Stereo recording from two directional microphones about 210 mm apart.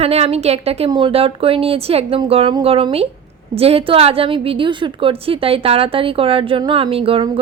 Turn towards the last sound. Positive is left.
turn(degrees=-25)  # may be behind; listen again after turning